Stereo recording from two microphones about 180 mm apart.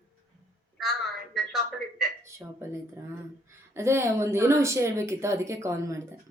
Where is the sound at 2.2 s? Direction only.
15° right (ahead or behind).